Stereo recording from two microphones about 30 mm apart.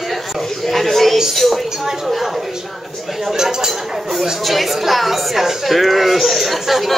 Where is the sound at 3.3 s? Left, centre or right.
Centre.